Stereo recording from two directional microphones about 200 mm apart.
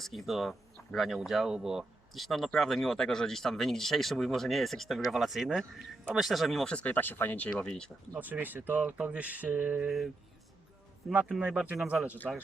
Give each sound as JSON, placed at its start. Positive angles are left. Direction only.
{"t": 0.0, "sound": "speech", "side_deg": 0}
{"t": 8.2, "sound": "speech", "side_deg": -10}
{"t": 11.1, "sound": "speech", "side_deg": -5}